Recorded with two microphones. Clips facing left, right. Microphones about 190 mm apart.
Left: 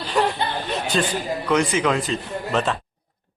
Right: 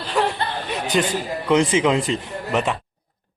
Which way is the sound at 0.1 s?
5° right (ahead or behind).